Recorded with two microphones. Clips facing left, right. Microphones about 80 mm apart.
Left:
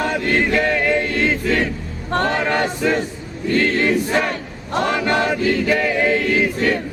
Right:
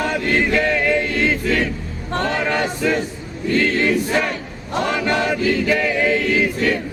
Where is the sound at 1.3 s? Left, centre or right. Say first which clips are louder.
Even; left.